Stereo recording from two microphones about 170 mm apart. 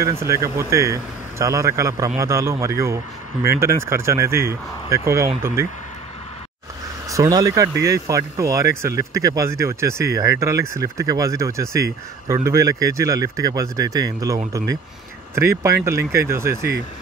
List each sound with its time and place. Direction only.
0.0 s speech: 15° right (ahead or behind)
7.1 s speech: 20° right (ahead or behind)